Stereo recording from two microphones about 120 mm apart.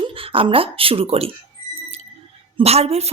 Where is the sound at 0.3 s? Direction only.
50° right (ahead or behind).